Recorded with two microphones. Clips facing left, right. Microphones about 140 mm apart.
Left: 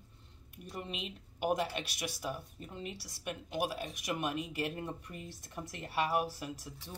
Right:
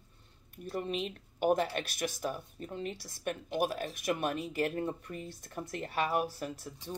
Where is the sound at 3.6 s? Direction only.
45° right (ahead or behind).